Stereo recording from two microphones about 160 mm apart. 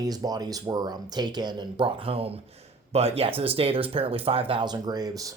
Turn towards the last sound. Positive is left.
turn(degrees=-20)  # may be behind; listen again after turning